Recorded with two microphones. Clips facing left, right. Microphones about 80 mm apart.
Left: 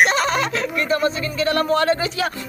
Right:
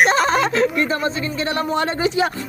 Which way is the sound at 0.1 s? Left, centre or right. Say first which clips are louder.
Right 3 dB; right.